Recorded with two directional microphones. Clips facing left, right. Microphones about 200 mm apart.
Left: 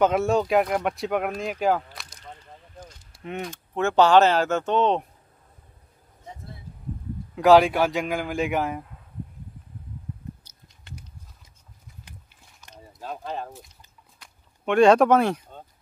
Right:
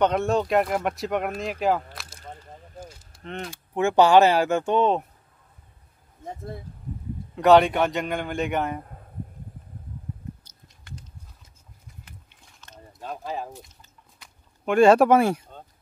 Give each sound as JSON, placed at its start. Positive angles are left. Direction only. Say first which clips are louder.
{"t": 0.0, "sound": "speech", "louder": "left 1 dB", "side_deg": 0}
{"t": 2.1, "sound": "a sound", "louder": "right 4 dB", "side_deg": -45}
{"t": 3.1, "sound": "a sound", "louder": "left 3 dB", "side_deg": 10}
{"t": 3.4, "sound": "speech", "louder": "right 2 dB", "side_deg": -10}
{"t": 6.2, "sound": "speech", "louder": "right 7 dB", "side_deg": -50}
{"t": 7.3, "sound": "speech", "louder": "even", "side_deg": 0}
{"t": 8.8, "sound": "a sound", "louder": "right 4 dB", "side_deg": -45}
{"t": 10.8, "sound": "horse", "louder": "right 1 dB", "side_deg": 20}
{"t": 12.3, "sound": "mechanisms", "louder": "even", "side_deg": 10}
{"t": 12.7, "sound": "mechanisms", "louder": "even", "side_deg": 0}
{"t": 14.2, "sound": "speech", "louder": "even", "side_deg": -5}